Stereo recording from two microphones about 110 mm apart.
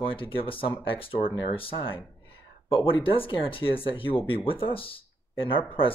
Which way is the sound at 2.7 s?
55° left (ahead or behind).